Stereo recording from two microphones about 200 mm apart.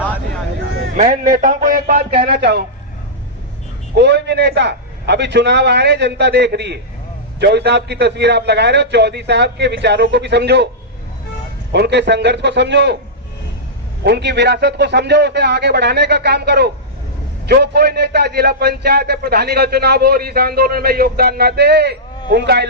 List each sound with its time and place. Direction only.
0.9 s a man's voice: 40° right (ahead or behind); by 2.6 s 55° right (ahead or behind)
3.9 s a man's voice: 60° right (ahead or behind)
11.7 s a man's voice: 55° right (ahead or behind)
14.0 s a man's voice: 55° right (ahead or behind)